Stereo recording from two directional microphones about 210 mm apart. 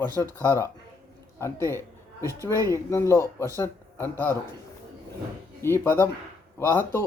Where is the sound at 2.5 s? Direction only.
15° right (ahead or behind).